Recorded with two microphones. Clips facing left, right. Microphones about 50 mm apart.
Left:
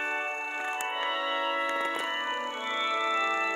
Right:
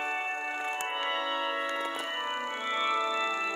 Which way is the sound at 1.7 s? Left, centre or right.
Left.